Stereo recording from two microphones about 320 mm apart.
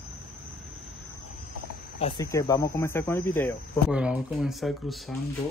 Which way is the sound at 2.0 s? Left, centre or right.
Centre.